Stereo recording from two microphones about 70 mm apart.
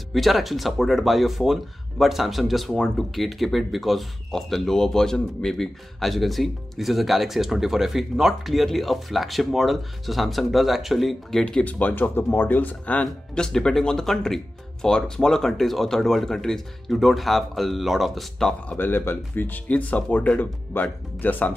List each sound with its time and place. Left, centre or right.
0.1 s speech: centre
11.4 s speech: centre
18.7 s speech: left